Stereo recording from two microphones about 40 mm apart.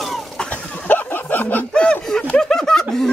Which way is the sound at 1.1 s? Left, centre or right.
Left.